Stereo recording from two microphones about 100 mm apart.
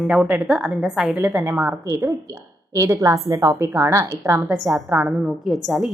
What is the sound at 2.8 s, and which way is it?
A woman's voice, 30° right (ahead or behind).